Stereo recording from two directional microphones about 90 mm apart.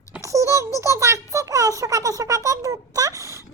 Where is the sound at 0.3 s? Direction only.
35° right (ahead or behind).